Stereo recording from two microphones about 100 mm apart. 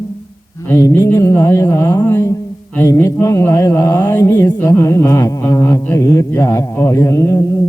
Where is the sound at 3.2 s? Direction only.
30° left (ahead or behind).